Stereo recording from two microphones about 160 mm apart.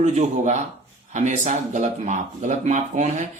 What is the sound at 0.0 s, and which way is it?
Speech, 45° right (ahead or behind).